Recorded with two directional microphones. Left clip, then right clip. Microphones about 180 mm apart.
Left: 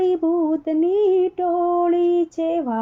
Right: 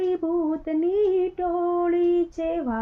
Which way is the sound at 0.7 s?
40° left (ahead or behind).